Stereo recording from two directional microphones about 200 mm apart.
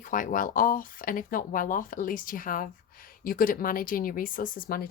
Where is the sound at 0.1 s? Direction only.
40° left (ahead or behind).